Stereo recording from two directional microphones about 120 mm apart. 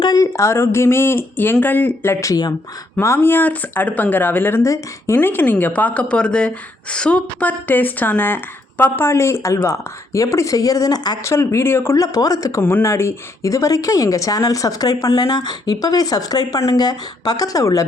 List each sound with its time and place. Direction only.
0.0 s speech: 30° left (ahead or behind)
2.3 s speech: 30° left (ahead or behind)